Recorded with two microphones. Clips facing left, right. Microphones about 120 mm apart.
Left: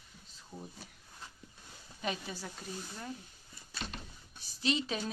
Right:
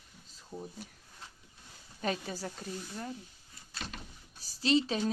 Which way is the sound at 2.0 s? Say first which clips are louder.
Right 4 dB; 40° right (ahead or behind).